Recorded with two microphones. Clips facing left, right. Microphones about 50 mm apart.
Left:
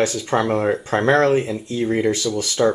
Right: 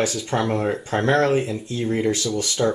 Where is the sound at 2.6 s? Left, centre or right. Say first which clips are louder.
Left 4 dB; left.